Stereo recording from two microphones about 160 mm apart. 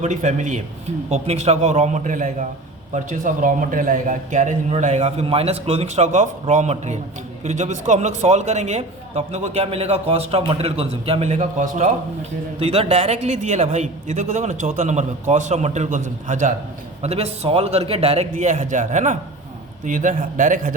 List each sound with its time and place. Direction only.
0.0 s a man's voice: 50° right (ahead or behind)
12.5 s a man's voice: 40° right (ahead or behind)